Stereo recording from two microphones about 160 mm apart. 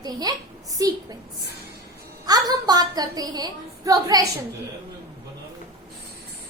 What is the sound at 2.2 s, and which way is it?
A woman's voice, 25° right (ahead or behind).